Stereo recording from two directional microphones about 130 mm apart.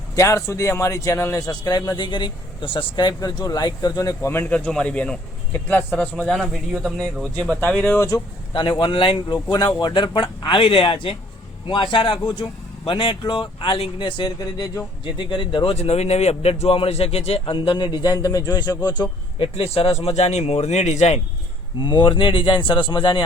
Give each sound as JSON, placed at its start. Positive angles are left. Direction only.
{"t": 0.2, "sound": "a man's voice", "side_deg": 25}
{"t": 4.3, "sound": "a man's voice", "side_deg": 15}
{"t": 6.3, "sound": "speech", "side_deg": -5}
{"t": 7.7, "sound": "a man's voice", "side_deg": 10}
{"t": 7.9, "sound": "a man's voice", "side_deg": 25}
{"t": 8.5, "sound": "a man's voice", "side_deg": 40}
{"t": 19.4, "sound": "speech", "side_deg": 45}
{"t": 21.8, "sound": "speech", "side_deg": 35}